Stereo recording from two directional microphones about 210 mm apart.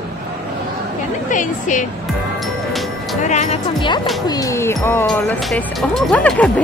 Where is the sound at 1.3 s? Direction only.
35° left (ahead or behind).